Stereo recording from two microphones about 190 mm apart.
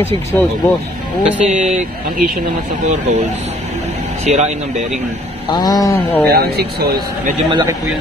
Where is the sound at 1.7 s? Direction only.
45° right (ahead or behind).